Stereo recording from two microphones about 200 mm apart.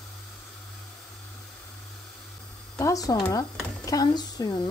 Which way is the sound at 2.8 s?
15° left (ahead or behind).